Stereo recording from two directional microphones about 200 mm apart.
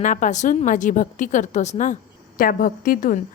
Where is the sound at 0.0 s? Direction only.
40° left (ahead or behind).